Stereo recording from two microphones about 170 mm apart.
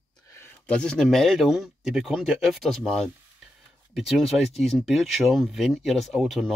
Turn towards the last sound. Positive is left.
turn(degrees=0)  # may be behind; listen again after turning